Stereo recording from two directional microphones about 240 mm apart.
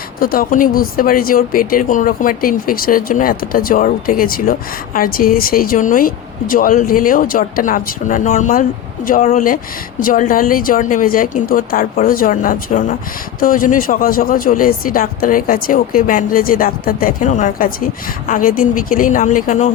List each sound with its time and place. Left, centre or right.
0.2 s speech: left